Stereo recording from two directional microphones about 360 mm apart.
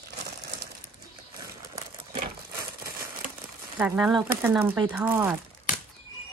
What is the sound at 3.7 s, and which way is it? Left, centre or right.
Speech, centre.